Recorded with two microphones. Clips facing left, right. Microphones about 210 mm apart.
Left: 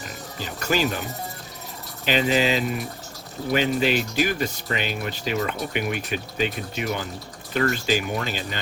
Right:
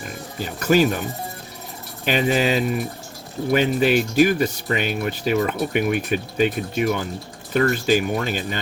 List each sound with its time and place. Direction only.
0.3 s speech: 50° right (ahead or behind)
2.0 s speech: 50° right (ahead or behind)